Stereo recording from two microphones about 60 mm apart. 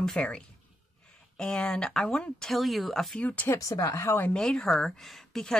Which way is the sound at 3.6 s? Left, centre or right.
Left.